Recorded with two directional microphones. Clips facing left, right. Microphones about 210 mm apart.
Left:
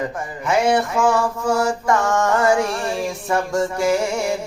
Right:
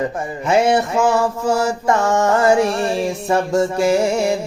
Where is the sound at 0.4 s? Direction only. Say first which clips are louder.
Right 2 dB; 25° right (ahead or behind).